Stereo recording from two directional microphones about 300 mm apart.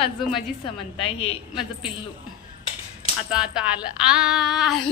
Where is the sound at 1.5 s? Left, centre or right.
Centre.